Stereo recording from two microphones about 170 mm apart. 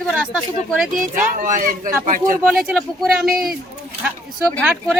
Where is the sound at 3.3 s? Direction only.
60° right (ahead or behind).